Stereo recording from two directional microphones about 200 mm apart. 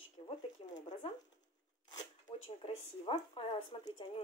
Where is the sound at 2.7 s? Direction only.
30° left (ahead or behind).